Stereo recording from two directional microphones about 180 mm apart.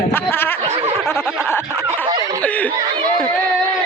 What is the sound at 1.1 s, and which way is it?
Snicker, 15° left (ahead or behind).